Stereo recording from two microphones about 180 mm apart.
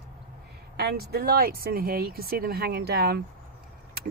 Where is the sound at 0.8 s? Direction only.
60° right (ahead or behind).